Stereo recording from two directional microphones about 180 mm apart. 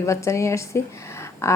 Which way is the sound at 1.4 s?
15° left (ahead or behind).